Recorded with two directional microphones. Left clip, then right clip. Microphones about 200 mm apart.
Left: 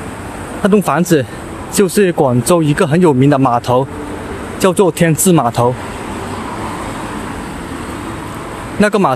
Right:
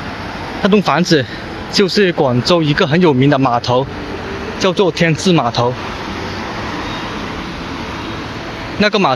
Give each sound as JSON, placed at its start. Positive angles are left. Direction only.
{"t": 0.6, "sound": "speech", "side_deg": 15}
{"t": 4.6, "sound": "speech", "side_deg": 20}
{"t": 8.7, "sound": "speech", "side_deg": 20}